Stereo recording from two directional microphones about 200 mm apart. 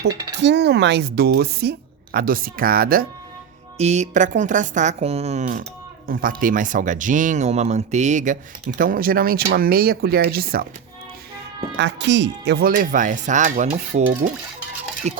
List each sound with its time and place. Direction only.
0.3 s speech: 60° right (ahead or behind)
3.8 s speech: 35° right (ahead or behind)
11.8 s speech: 60° right (ahead or behind); by 15.2 s 35° right (ahead or behind)